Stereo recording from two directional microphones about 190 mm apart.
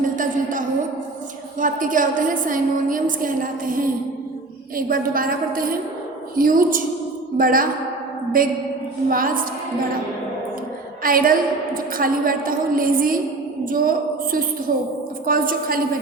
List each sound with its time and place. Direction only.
0.0 s a sound: 45° right (ahead or behind)
1.5 s a woman's voice: 45° right (ahead or behind)
11.0 s a woman's voice: 50° right (ahead or behind)